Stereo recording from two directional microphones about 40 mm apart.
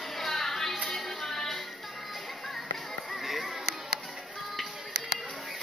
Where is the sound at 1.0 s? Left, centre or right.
Left.